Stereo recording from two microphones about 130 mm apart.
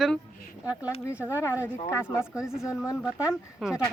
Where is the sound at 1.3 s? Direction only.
20° left (ahead or behind).